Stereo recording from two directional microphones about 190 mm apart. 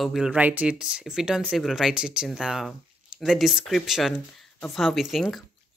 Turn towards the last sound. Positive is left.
turn(degrees=0)  # may be behind; listen again after turning